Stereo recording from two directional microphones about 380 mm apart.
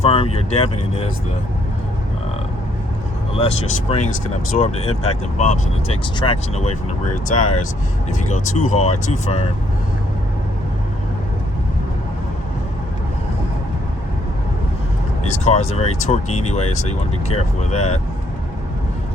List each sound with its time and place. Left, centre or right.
0.0 s speech: centre
3.3 s speech: centre
15.3 s speech: centre